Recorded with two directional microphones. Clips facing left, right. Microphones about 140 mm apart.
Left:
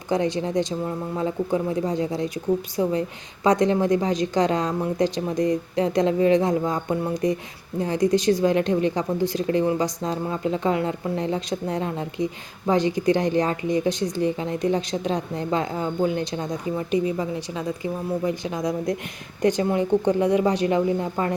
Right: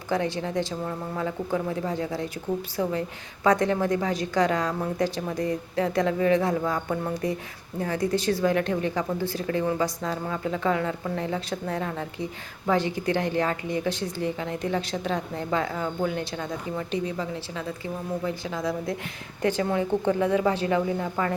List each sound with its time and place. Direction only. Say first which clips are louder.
0.1 s a woman's voice: left 4 dB; 20° left (ahead or behind)